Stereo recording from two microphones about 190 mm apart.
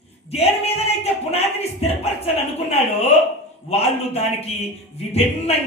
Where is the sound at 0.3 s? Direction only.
35° left (ahead or behind).